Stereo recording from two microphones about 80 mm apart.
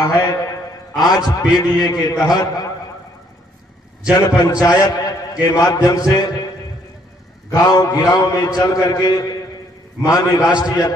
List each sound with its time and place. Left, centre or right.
0.9 s a man's voice: left
4.4 s a man's voice: left
7.4 s a man's voice: left